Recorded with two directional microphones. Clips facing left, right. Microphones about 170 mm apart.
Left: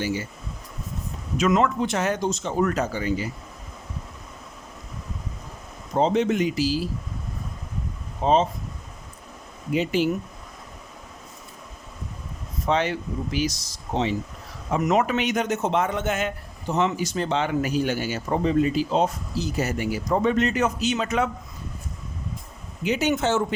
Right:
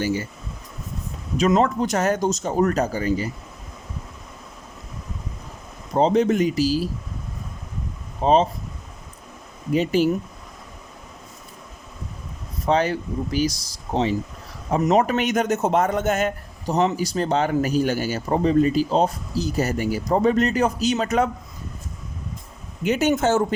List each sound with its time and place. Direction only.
0.0 s speech: 45° right (ahead or behind)
1.4 s a man's voice: 35° right (ahead or behind)
5.9 s a man's voice: 35° right (ahead or behind)
8.2 s a man's voice: 35° right (ahead or behind)
9.7 s a man's voice: 40° right (ahead or behind)
12.6 s a man's voice: 40° right (ahead or behind)
15.0 s a man's voice: 45° right (ahead or behind)
22.8 s speech: 50° right (ahead or behind)